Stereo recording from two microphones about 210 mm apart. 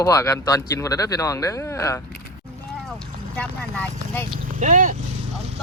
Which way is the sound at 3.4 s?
5° left (ahead or behind).